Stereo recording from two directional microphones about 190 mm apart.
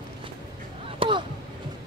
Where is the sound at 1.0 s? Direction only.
25° right (ahead or behind).